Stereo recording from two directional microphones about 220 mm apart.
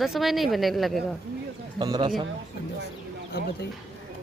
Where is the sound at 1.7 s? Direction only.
20° right (ahead or behind).